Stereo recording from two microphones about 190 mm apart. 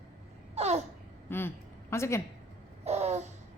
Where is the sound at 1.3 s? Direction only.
10° left (ahead or behind).